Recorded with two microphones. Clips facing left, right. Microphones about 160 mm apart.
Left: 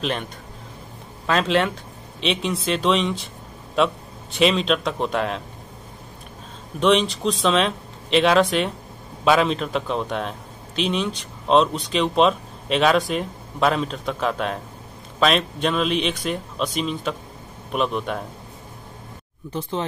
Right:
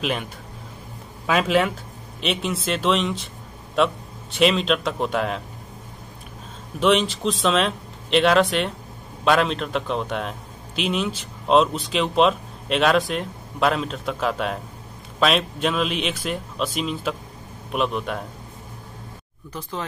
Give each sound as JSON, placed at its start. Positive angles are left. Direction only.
{"t": 0.0, "sound": "a man's voice", "side_deg": -5}
{"t": 6.8, "sound": "speech", "side_deg": 0}
{"t": 19.5, "sound": "speech", "side_deg": 25}